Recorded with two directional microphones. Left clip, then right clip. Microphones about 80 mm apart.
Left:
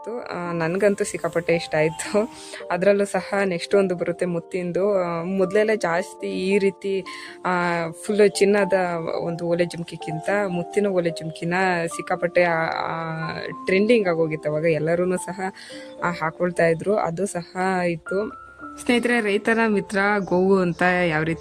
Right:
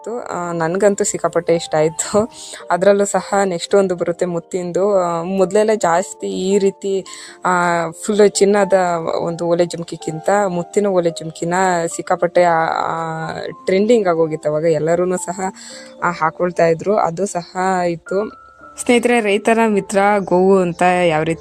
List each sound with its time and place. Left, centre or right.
0.0 s speech: right
1.1 s speech: centre
1.5 s speech: right
18.9 s speech: right